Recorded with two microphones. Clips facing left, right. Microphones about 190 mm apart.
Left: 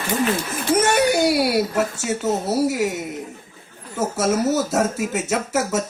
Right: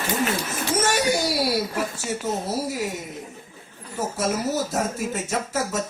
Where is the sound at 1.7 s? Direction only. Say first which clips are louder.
Left 5 dB; 75° left (ahead or behind).